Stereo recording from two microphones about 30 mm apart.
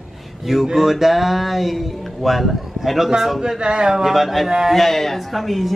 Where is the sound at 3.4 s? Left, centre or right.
Right.